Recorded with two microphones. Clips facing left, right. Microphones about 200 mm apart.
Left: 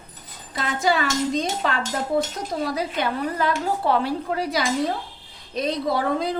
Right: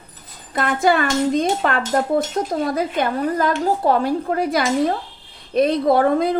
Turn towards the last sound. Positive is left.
turn(degrees=-55)  # may be behind; listen again after turning